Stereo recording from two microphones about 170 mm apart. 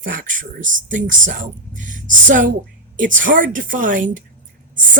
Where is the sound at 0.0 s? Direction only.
55° right (ahead or behind).